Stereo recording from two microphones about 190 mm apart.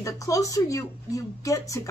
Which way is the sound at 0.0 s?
15° left (ahead or behind).